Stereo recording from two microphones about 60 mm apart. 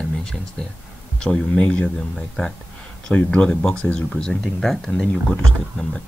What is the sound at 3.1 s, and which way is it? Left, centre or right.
Speech, left.